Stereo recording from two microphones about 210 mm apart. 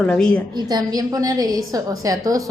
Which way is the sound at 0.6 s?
20° right (ahead or behind).